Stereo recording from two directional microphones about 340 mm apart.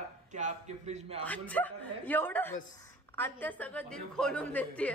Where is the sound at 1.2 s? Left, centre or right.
Centre.